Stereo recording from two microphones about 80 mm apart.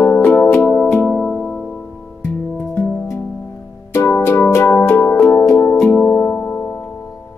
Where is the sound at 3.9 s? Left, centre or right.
Left.